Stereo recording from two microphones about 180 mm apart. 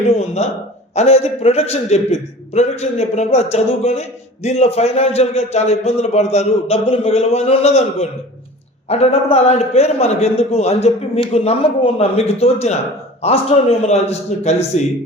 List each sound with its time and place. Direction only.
0.1 s a man's voice: 35° left (ahead or behind)